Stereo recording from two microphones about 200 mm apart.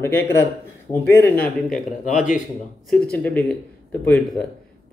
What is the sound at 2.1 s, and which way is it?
Speech, 40° left (ahead or behind).